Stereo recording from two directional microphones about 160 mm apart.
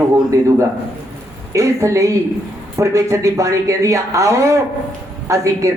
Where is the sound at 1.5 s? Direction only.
20° right (ahead or behind).